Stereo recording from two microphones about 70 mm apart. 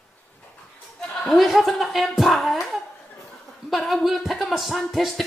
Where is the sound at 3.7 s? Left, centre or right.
Centre.